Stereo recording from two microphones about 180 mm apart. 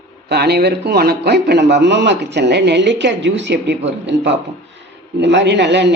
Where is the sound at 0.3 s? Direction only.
65° right (ahead or behind).